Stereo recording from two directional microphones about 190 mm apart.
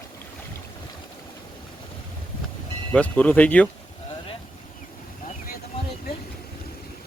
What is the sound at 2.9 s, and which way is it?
Speech, 5° left (ahead or behind).